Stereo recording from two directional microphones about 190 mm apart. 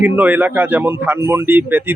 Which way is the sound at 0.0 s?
10° right (ahead or behind).